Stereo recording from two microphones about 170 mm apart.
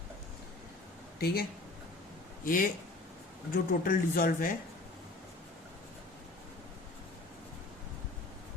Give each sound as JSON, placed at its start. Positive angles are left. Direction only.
{"t": 1.2, "sound": "speech", "side_deg": 65}
{"t": 2.4, "sound": "speech", "side_deg": 55}